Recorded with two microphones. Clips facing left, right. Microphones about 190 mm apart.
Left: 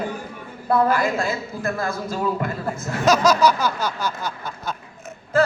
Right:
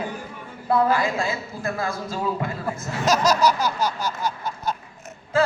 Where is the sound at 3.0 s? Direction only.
55° left (ahead or behind).